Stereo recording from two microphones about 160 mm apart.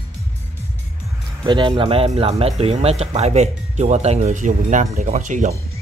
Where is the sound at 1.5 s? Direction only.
30° right (ahead or behind); by 5.5 s 50° right (ahead or behind).